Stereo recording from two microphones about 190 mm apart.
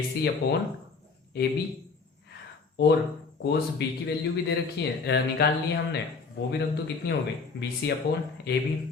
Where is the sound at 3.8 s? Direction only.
60° left (ahead or behind).